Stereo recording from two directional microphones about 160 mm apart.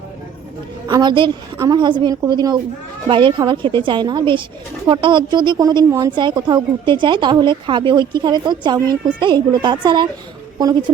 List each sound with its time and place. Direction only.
0.9 s a woman's voice: 25° right (ahead or behind)